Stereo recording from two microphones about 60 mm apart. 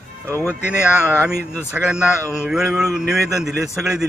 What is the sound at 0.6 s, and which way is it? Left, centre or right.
Speech, right.